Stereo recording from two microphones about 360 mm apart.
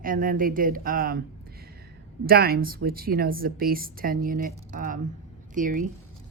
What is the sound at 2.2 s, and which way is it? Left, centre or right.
Speech, right.